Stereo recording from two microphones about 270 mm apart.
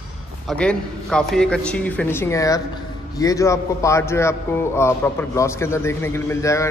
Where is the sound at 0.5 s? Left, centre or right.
Centre.